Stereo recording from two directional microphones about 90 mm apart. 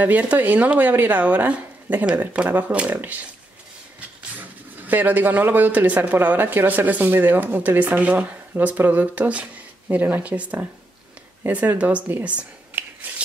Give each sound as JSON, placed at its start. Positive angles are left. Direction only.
{"t": 0.0, "sound": "speech", "side_deg": -15}
{"t": 4.4, "sound": "speech", "side_deg": -20}
{"t": 13.0, "sound": "a sound", "side_deg": -20}